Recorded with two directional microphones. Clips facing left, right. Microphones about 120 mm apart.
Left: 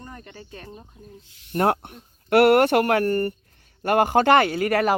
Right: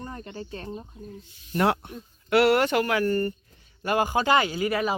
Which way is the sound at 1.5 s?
45° left (ahead or behind).